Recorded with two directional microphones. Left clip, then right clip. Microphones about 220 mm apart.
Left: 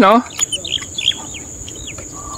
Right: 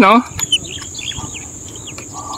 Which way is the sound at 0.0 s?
Centre (ahead or behind).